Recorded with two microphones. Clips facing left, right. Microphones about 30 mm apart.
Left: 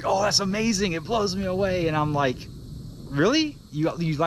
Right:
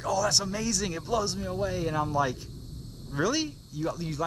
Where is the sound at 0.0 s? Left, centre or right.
Left.